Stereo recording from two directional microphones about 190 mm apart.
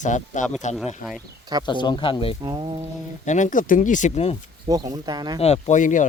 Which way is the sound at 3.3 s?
40° left (ahead or behind).